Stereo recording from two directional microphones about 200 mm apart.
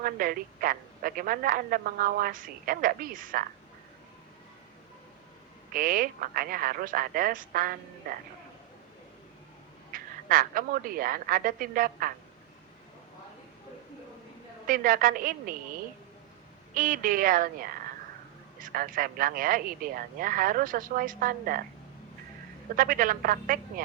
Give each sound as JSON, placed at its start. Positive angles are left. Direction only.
{"t": 0.0, "sound": "a woman's voice", "side_deg": -45}
{"t": 5.7, "sound": "a woman's voice", "side_deg": -45}
{"t": 9.9, "sound": "a woman's voice", "side_deg": -45}
{"t": 14.7, "sound": "a woman's voice", "side_deg": -45}
{"t": 16.7, "sound": "a woman's voice", "side_deg": -45}
{"t": 22.7, "sound": "a woman's voice", "side_deg": -45}